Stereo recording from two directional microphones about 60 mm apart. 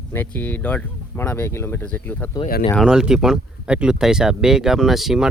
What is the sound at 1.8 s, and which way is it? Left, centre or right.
Speech, left.